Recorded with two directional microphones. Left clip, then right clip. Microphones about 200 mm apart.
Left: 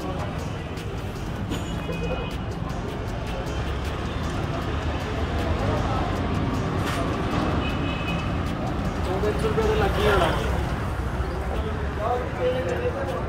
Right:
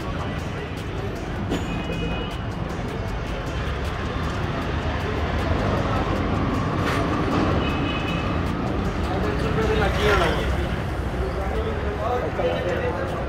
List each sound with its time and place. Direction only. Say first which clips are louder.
9.6 s vehicle: right 2 dB; 45° left (ahead or behind)